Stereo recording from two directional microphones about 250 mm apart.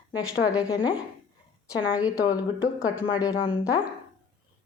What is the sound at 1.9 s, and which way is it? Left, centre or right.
Speech, centre.